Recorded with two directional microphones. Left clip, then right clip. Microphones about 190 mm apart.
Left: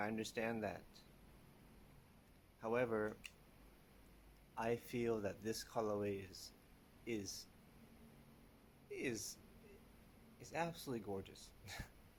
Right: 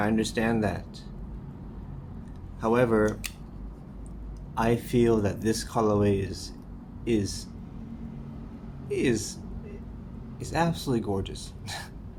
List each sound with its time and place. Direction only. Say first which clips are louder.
0.0 s speech: right 16 dB; 25° left (ahead or behind)
2.6 s speech: right 16 dB; 25° left (ahead or behind)
4.5 s speech: right 17 dB; 25° left (ahead or behind)
8.9 s speech: right 18 dB; 25° left (ahead or behind)
10.4 s speech: right 16 dB; 25° left (ahead or behind)